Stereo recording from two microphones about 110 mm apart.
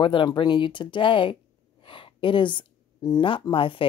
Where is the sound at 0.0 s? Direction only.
45° left (ahead or behind).